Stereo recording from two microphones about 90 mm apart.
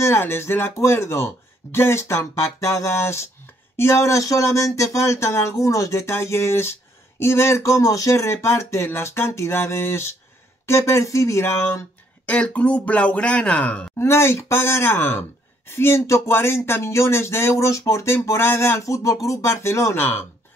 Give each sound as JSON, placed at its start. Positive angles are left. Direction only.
{"t": 0.0, "sound": "speech", "side_deg": 25}
{"t": 12.3, "sound": "speech", "side_deg": 15}
{"t": 13.9, "sound": "speech", "side_deg": 30}